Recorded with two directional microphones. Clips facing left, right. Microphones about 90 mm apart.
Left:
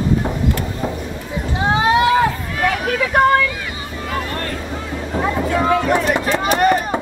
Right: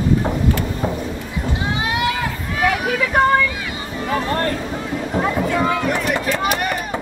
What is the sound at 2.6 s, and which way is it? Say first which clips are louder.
Vehicle: right 1 dB; 5° right (ahead or behind).